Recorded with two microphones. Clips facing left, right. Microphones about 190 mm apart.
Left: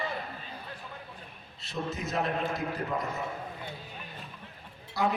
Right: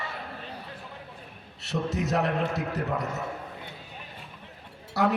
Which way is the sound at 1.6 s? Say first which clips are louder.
Right 6 dB; 75° right (ahead or behind).